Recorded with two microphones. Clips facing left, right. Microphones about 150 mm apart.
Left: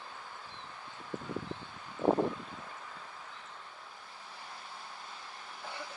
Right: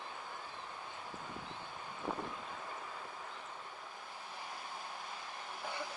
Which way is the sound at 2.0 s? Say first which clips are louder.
Left 13 dB; 65° left (ahead or behind).